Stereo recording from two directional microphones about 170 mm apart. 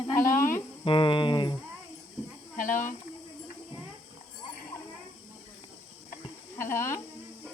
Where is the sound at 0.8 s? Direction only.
30° left (ahead or behind).